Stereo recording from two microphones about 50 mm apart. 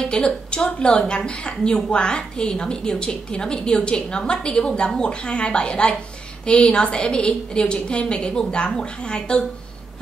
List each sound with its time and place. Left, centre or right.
0.0 s a woman's voice: centre